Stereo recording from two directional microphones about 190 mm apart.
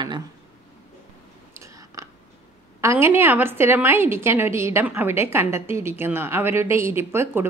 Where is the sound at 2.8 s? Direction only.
15° right (ahead or behind).